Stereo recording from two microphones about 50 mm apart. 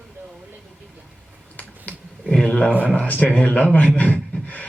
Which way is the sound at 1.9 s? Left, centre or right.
Left.